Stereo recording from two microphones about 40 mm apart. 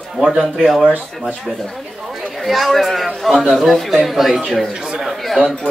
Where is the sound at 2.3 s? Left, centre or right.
Centre.